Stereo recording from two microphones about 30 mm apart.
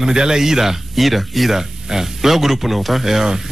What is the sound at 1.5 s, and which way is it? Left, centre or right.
Speech, centre.